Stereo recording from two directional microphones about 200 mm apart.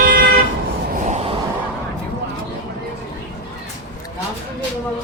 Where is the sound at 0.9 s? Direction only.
35° right (ahead or behind).